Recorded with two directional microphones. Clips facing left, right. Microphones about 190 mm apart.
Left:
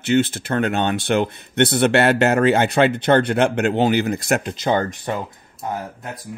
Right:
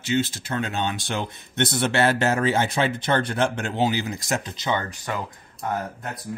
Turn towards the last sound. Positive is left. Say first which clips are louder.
# even
turn(degrees=10)  # may be behind; listen again after turning